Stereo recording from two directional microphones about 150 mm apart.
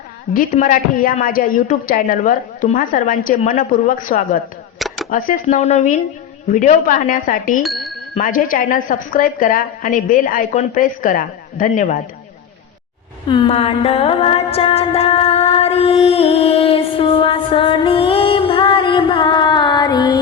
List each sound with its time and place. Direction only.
0.3 s a woman's voice: 60° left (ahead or behind)
4.8 s camera: centre (ahead or behind)
5.1 s a woman's voice: 65° left (ahead or behind)
7.6 s bicycle bell: centre (ahead or behind)
8.2 s a woman's voice: 65° left (ahead or behind)
13.2 s music: 30° left (ahead or behind)